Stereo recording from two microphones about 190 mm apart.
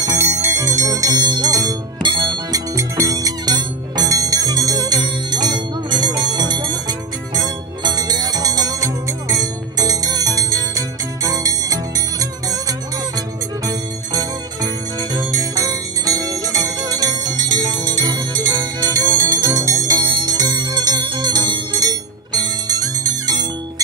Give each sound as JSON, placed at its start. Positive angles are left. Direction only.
{"t": 0.0, "sound": "music", "side_deg": -15}
{"t": 15.1, "sound": "jingle bell", "side_deg": -20}